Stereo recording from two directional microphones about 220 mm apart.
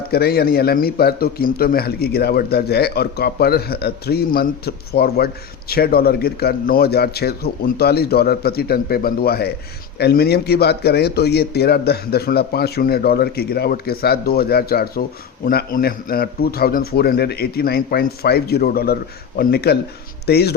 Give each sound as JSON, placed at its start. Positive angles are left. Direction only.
{"t": 0.1, "sound": "a man's voice", "side_deg": 45}